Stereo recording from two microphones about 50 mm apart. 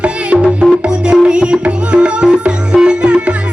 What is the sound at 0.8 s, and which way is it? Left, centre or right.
Tabla, right.